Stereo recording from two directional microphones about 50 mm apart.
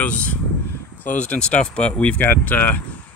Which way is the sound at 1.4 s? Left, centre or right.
Left.